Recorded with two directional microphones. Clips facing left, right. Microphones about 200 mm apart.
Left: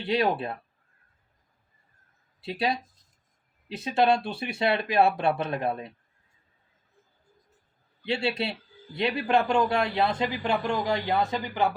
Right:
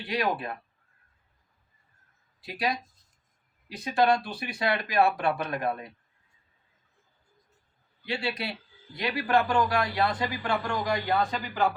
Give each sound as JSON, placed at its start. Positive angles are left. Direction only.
{"t": 0.0, "sound": "speech", "side_deg": 25}
{"t": 2.4, "sound": "speech", "side_deg": 25}
{"t": 3.8, "sound": "speech", "side_deg": 25}
{"t": 8.0, "sound": "speech", "side_deg": 25}